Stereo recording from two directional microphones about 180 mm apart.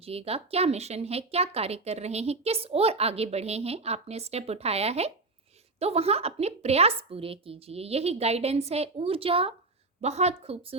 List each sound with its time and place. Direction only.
0.0 s speech: 35° right (ahead or behind)